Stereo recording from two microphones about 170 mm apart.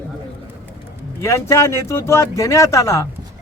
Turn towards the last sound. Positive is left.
turn(degrees=15)  # may be behind; listen again after turning